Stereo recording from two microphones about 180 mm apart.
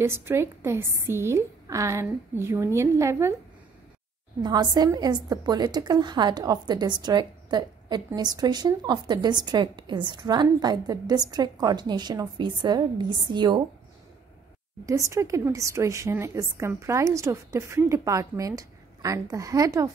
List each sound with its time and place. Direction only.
0.0 s a woman's voice: 15° right (ahead or behind)
4.4 s a woman's voice: 20° right (ahead or behind)
14.9 s a woman's voice: 15° right (ahead or behind)